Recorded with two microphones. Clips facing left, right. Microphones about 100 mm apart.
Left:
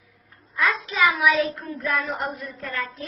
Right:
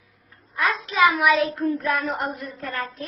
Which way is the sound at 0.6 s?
45° right (ahead or behind).